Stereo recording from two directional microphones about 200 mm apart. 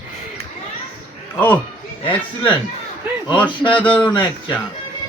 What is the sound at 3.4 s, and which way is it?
Speech, 25° left (ahead or behind).